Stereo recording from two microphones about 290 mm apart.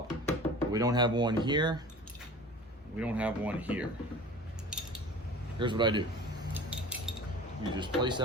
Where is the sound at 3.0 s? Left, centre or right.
Centre.